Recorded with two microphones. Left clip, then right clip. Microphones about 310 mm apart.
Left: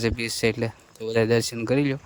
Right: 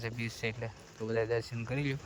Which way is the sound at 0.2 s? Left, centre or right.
Centre.